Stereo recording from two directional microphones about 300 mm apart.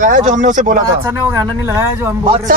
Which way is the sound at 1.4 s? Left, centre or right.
Centre.